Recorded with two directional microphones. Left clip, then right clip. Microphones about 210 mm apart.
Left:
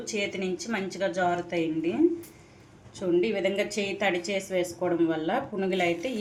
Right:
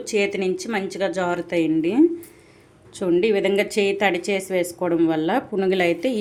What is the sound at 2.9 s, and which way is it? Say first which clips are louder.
Speech: right 7 dB; 55° right (ahead or behind).